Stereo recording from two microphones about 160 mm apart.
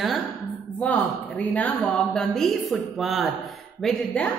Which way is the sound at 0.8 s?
10° left (ahead or behind).